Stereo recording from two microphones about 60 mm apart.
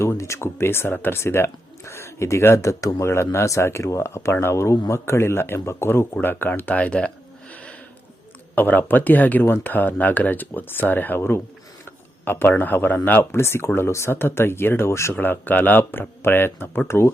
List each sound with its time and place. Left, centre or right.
0.2 s speech: left
7.5 s a sound: left
8.5 s speech: left
13.3 s speech: left
15.1 s speech: left